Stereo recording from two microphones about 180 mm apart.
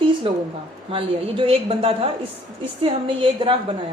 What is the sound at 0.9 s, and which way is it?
A woman's voice, 30° right (ahead or behind).